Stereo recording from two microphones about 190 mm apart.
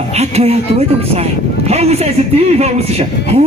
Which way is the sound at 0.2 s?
35° right (ahead or behind).